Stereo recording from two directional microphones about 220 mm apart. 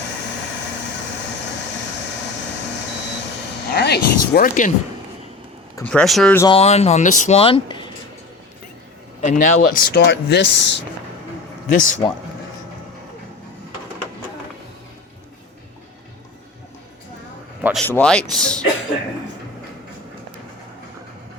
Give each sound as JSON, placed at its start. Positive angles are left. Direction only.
{"t": 3.8, "sound": "speech", "side_deg": 45}
{"t": 5.7, "sound": "speech", "side_deg": 5}
{"t": 6.4, "sound": "speech", "side_deg": 25}
{"t": 9.2, "sound": "speech", "side_deg": 35}
{"t": 11.7, "sound": "speech", "side_deg": 35}
{"t": 17.6, "sound": "a sound", "side_deg": -5}
{"t": 17.8, "sound": "speech", "side_deg": 5}